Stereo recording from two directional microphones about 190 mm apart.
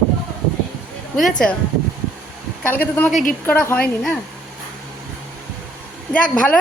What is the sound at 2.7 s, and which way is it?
A woman's voice, 10° left (ahead or behind).